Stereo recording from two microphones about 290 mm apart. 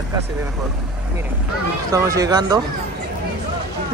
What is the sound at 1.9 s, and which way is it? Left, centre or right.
Speech, centre.